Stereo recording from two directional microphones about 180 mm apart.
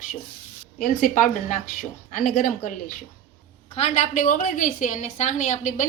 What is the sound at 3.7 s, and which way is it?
A woman's voice, 40° left (ahead or behind).